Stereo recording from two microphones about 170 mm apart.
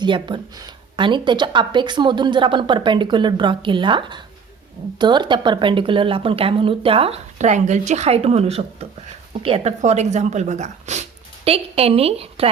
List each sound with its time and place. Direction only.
0.0 s speech: 25° right (ahead or behind)